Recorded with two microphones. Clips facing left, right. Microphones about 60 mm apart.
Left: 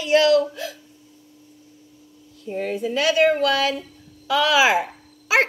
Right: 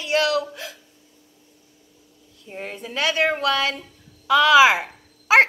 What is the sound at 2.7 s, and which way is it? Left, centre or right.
A woman's voice, right.